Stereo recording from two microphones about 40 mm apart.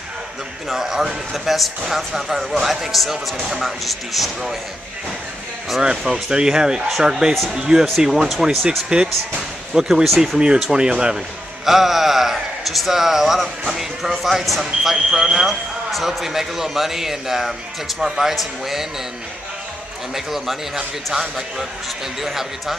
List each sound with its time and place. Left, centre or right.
0.7 s a man's voice: centre
5.8 s speech: centre
8.0 s speech: centre
8.6 s speech: right
11.6 s speech: centre
20.2 s speech: centre
22.2 s speech: centre